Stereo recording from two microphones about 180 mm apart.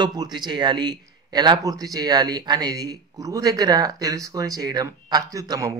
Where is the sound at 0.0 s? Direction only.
25° right (ahead or behind).